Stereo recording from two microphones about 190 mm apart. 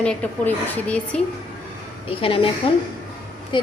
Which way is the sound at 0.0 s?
5° left (ahead or behind).